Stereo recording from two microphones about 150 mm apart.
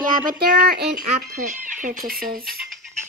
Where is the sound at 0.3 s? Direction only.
90° right; by 2.0 s 55° right (ahead or behind).